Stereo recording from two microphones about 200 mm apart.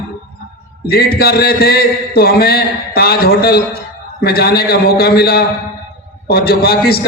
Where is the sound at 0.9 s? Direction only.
50° left (ahead or behind).